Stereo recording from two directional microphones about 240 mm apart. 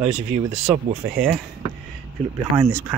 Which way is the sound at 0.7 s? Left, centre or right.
Centre.